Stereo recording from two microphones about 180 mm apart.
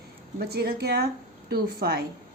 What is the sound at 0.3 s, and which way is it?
A woman's voice, 60° right (ahead or behind).